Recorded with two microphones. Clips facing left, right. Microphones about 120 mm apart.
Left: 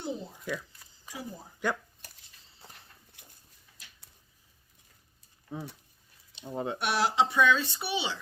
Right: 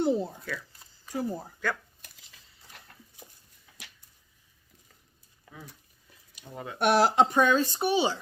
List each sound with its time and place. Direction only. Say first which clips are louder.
0.0 s speech: right 10 dB; 65° right (ahead or behind)
1.1 s speech: right 10 dB; 50° right (ahead or behind)
1.6 s speech: left 1 dB; 20° left (ahead or behind)
6.3 s speech: left 6 dB; 25° left (ahead or behind)
6.7 s speech: right 6 dB; 50° right (ahead or behind)